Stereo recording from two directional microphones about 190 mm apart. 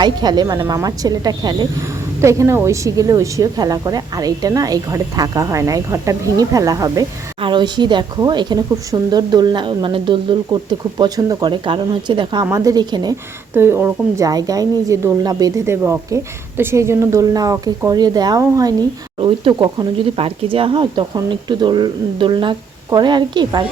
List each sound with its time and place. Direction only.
0.0 s a woman's voice: 20° right (ahead or behind)